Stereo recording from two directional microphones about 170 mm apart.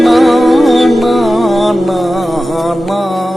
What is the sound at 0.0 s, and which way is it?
Music, centre (ahead or behind).